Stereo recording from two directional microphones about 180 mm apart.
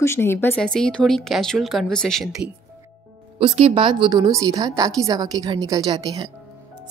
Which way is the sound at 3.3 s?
35° right (ahead or behind).